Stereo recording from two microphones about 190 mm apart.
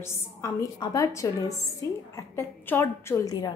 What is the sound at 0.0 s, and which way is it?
A woman's voice, 15° left (ahead or behind).